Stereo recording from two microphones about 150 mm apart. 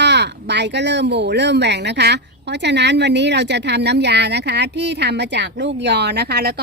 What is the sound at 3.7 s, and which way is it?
Speech, 90° right.